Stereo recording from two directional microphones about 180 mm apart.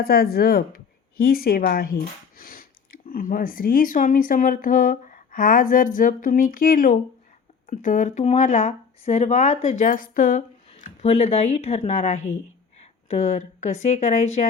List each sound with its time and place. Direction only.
0.0 s speech: 60° left (ahead or behind); by 14.4 s 40° left (ahead or behind)